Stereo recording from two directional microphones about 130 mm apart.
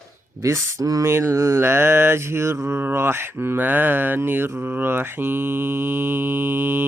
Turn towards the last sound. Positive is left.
turn(degrees=-15)  # may be behind; listen again after turning